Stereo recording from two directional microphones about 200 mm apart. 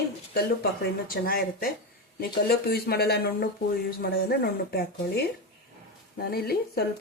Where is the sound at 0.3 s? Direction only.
50° left (ahead or behind).